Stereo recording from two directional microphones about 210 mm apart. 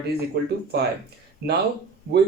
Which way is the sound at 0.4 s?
50° right (ahead or behind).